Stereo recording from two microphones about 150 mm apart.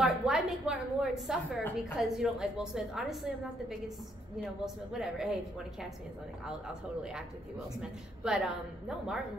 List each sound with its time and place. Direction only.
0.0 s a woman's voice: 5° right (ahead or behind)
4.9 s a woman's voice: 5° right (ahead or behind)